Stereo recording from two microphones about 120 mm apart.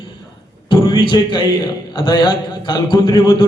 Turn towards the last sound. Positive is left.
turn(degrees=40)  # may be behind; listen again after turning